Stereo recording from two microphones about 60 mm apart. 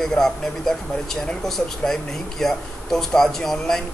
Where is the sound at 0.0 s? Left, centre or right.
Centre.